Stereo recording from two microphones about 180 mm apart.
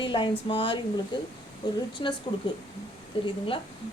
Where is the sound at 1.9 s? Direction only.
25° left (ahead or behind).